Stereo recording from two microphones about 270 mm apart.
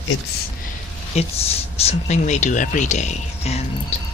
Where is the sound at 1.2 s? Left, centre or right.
Left.